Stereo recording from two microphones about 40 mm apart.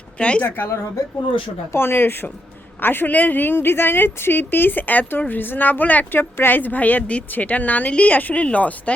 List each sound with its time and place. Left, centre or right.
0.2 s speech: left
0.4 s a woman's voice: left
1.7 s a woman's voice: left
6.1 s speech: left